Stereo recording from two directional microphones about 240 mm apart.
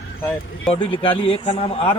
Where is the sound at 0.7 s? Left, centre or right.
Left.